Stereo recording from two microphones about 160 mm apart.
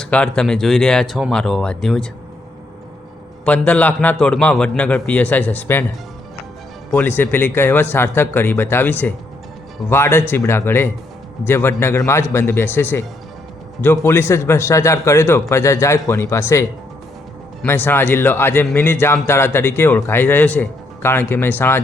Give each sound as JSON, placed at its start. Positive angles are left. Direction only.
{"t": 0.0, "sound": "speech", "side_deg": 5}
{"t": 3.4, "sound": "speech", "side_deg": 10}
{"t": 6.9, "sound": "speech", "side_deg": 15}